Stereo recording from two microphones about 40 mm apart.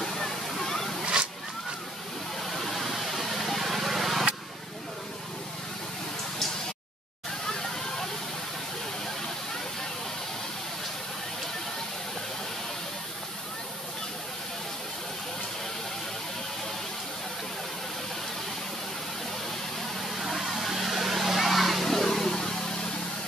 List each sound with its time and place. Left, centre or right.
0.0 s waterfall: centre
1.1 s zipper: right
2.5 s vehicle: centre
20.2 s a sound: centre